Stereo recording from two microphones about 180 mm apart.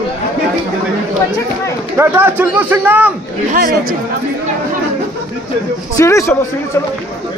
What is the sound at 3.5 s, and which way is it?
Speech, 50° right (ahead or behind).